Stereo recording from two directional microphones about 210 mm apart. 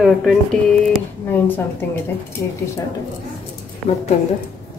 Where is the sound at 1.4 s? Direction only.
10° left (ahead or behind).